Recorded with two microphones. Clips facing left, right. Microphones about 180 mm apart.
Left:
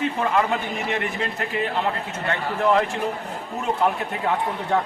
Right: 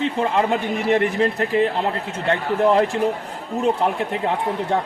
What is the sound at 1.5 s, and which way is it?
A man's voice, 35° right (ahead or behind).